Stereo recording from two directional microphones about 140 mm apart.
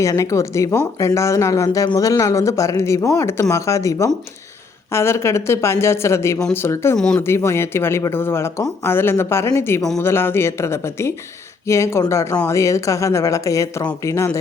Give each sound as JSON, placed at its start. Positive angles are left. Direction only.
{"t": 0.0, "sound": "speech", "side_deg": 20}
{"t": 6.9, "sound": "speech", "side_deg": 5}
{"t": 7.2, "sound": "speech", "side_deg": 20}